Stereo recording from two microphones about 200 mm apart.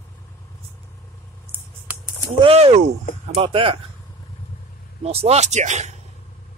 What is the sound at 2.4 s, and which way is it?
Speech, 30° right (ahead or behind).